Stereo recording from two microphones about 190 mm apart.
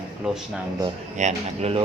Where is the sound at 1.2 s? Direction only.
35° right (ahead or behind).